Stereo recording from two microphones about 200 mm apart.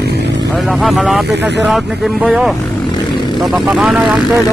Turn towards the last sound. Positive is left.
turn(degrees=0)  # may be behind; listen again after turning